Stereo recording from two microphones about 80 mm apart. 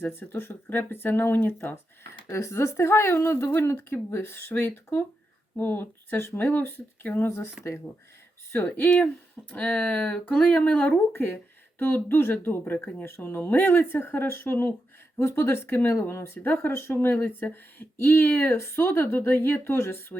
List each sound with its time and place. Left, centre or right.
0.0 s speech: left
8.5 s speech: left